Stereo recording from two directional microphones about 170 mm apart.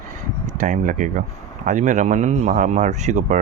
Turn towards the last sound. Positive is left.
turn(degrees=-45)  # may be behind; listen again after turning